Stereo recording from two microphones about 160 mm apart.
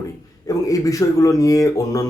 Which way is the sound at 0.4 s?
20° left (ahead or behind).